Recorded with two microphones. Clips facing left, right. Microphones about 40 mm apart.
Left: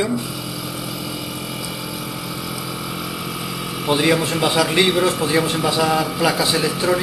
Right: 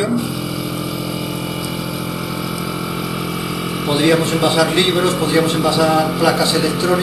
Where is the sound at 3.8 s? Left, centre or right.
Centre.